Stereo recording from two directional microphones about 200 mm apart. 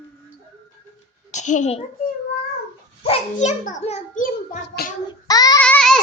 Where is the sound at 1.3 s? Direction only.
35° left (ahead or behind).